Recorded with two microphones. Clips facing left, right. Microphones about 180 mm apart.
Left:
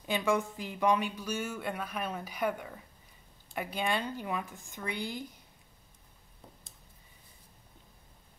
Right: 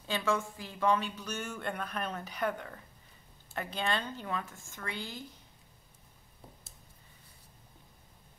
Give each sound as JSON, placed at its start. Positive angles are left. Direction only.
{"t": 0.0, "sound": "a woman's voice", "side_deg": 15}